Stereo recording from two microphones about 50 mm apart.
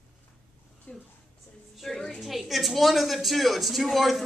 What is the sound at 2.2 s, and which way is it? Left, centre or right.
A woman's voice, centre.